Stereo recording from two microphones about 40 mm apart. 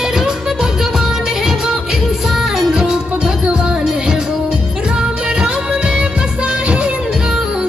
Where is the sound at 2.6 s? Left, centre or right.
Centre.